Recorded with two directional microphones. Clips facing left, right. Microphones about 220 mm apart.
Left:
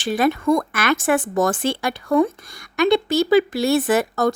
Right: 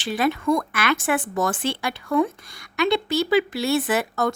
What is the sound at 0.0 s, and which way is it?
Speech, 45° left (ahead or behind).